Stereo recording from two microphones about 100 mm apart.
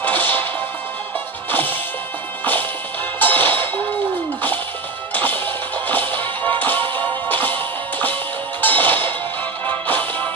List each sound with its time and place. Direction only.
0.0 s whip: 20° left (ahead or behind)
1.5 s music: 20° left (ahead or behind)
3.2 s music: 20° left (ahead or behind)
5.1 s music: 20° left (ahead or behind)
6.8 s music: 55° right (ahead or behind)
7.2 s music: 20° left (ahead or behind)